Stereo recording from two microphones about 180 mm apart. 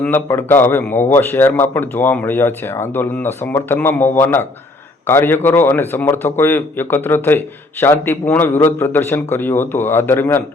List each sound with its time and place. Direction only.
0.0 s a man's voice: 10° left (ahead or behind)